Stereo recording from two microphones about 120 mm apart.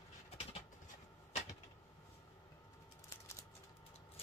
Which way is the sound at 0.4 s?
55° left (ahead or behind).